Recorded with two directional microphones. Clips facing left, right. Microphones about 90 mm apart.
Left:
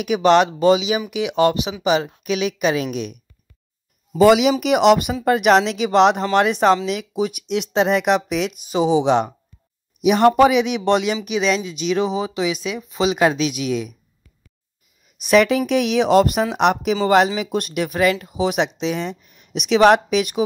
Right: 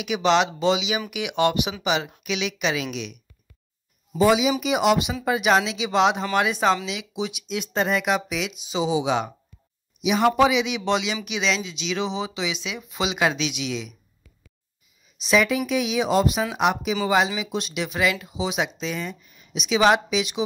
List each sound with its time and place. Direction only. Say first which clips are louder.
0.0 s a woman's voice: left 6 dB; 50° left (ahead or behind)
4.2 s speech: left 6 dB; 70° left (ahead or behind)
6.9 s speech: left 7 dB; 50° left (ahead or behind)
12.0 s a woman's voice: left 4 dB; 40° left (ahead or behind)
15.2 s speech: left 6 dB; 60° left (ahead or behind)